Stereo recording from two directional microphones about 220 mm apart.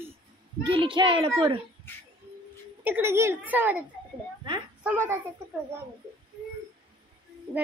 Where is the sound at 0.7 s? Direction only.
25° right (ahead or behind).